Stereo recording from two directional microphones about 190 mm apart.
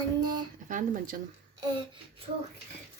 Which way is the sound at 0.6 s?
45° right (ahead or behind).